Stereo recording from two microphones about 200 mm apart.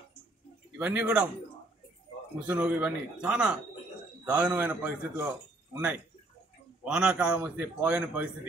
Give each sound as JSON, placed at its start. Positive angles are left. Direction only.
{"t": 0.7, "sound": "a man's voice", "side_deg": -5}
{"t": 2.4, "sound": "a man's voice", "side_deg": -5}